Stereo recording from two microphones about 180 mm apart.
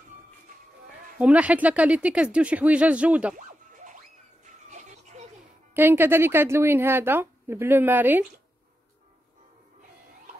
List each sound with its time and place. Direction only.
1.1 s speech: 5° right (ahead or behind)
3.3 s music: 45° right (ahead or behind)
5.8 s speech: 10° right (ahead or behind)